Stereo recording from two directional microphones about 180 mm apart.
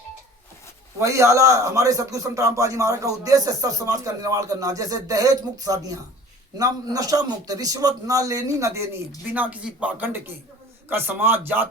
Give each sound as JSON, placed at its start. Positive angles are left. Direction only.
{"t": 0.9, "sound": "a man's voice", "side_deg": -15}